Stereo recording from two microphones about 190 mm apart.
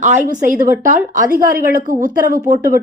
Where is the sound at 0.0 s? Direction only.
40° right (ahead or behind).